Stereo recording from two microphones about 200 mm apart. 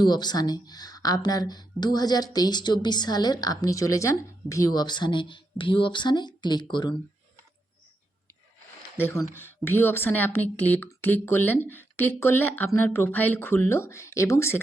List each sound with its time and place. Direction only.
0.0 s speech: 20° left (ahead or behind)
9.0 s a woman's voice: 10° left (ahead or behind)